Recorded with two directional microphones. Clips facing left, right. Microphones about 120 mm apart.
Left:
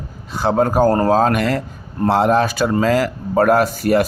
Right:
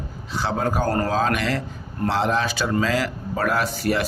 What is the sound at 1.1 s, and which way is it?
Speech, 45° left (ahead or behind).